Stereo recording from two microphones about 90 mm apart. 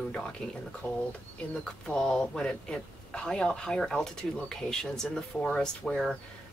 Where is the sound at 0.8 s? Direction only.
20° left (ahead or behind).